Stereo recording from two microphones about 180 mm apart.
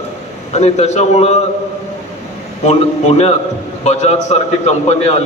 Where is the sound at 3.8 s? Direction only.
40° left (ahead or behind).